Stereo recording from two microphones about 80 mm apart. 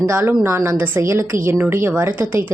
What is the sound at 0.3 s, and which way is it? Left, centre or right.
A woman's voice, right.